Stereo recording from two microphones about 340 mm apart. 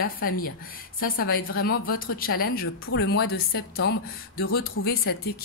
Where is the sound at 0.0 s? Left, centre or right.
Left.